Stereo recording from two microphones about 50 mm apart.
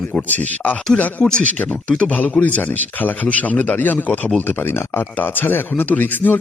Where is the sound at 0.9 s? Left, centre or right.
Centre.